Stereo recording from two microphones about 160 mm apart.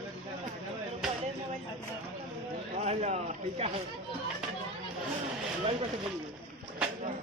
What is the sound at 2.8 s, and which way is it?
Speech, 45° right (ahead or behind).